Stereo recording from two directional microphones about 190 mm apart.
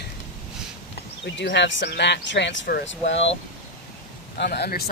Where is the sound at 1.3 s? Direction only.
70° left (ahead or behind).